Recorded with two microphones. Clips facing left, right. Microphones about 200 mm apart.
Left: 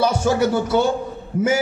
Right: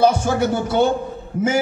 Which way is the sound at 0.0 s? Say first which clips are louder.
Right 1 dB; 55° right (ahead or behind).